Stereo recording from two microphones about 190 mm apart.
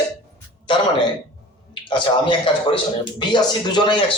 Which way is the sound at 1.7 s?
25° left (ahead or behind).